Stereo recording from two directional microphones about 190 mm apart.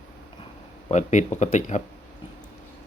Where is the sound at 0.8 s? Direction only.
40° left (ahead or behind).